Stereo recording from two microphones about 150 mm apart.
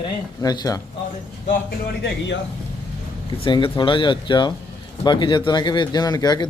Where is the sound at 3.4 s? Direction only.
35° left (ahead or behind).